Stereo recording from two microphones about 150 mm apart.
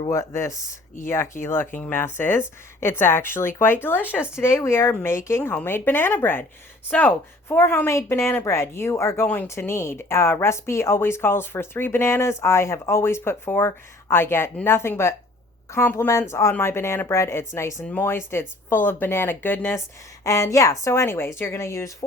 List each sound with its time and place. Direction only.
0.1 s a woman's voice: 20° left (ahead or behind)